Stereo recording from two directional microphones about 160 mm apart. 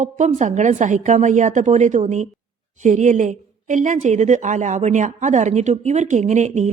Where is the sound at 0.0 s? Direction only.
50° right (ahead or behind).